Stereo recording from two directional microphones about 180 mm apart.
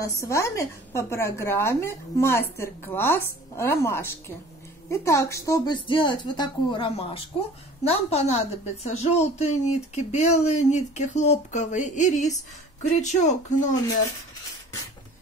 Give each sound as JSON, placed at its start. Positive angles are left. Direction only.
{"t": 0.0, "sound": "a woman's voice", "side_deg": 15}